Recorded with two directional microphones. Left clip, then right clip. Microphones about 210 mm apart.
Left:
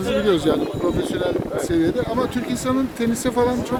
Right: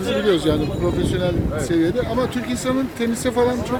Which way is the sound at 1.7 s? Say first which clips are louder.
Right 1 dB; centre (ahead or behind).